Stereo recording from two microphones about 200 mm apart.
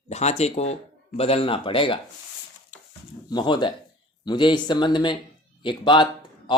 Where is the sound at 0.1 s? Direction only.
35° left (ahead or behind).